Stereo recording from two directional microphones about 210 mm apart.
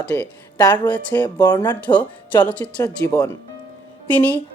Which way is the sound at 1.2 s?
20° left (ahead or behind).